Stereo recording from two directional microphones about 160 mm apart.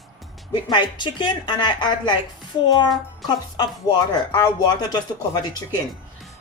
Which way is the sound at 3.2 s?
25° left (ahead or behind).